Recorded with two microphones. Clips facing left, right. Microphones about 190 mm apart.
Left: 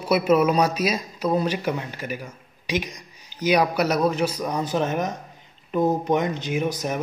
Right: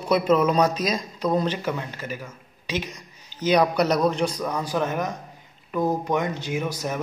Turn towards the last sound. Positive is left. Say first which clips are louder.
# left 2 dB
turn(degrees=20)  # may be behind; listen again after turning